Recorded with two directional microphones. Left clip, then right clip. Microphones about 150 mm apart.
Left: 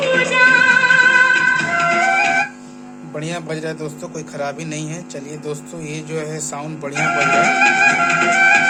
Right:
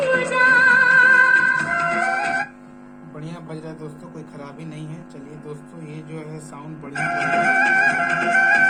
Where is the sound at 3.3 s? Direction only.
25° left (ahead or behind).